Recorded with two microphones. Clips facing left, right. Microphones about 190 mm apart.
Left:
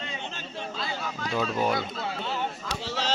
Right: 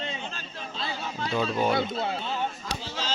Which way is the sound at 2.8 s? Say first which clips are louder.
Left 5 dB; 70° left (ahead or behind).